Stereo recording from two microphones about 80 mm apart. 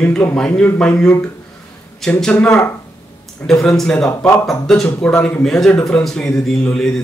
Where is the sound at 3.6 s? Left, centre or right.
Centre.